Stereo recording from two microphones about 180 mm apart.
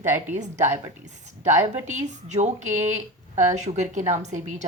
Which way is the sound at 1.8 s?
40° right (ahead or behind).